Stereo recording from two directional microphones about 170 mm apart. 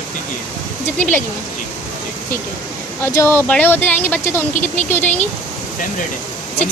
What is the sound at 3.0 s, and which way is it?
Speech, 15° left (ahead or behind).